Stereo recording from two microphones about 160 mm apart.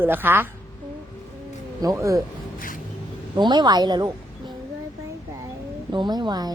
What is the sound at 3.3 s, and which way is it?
A woman's voice, 25° right (ahead or behind).